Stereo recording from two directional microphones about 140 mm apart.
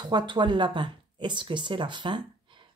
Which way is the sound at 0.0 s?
30° right (ahead or behind).